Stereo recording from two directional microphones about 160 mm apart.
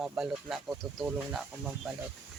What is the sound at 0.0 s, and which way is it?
Speech, 5° right (ahead or behind).